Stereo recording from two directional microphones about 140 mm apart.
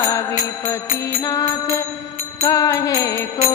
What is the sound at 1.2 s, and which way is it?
Music, 25° left (ahead or behind).